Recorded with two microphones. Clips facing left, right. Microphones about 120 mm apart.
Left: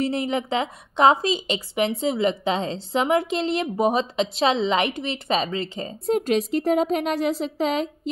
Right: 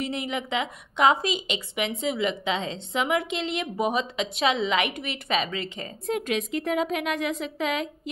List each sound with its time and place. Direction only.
0.0 s a woman's voice: 35° left (ahead or behind)